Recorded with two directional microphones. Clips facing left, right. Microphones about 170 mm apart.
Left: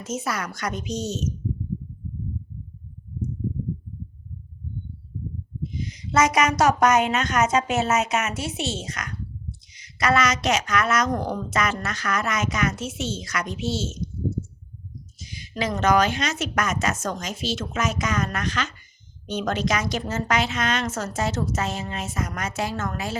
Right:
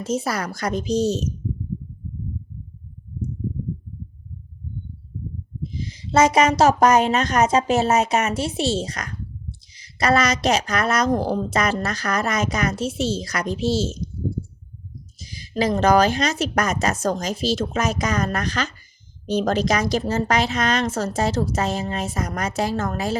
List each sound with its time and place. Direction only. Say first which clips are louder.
0.0 s a woman's voice: right 5 dB; 35° right (ahead or behind)
5.6 s a woman's voice: even; 30° right (ahead or behind)
15.2 s a woman's voice: right 6 dB; 35° right (ahead or behind)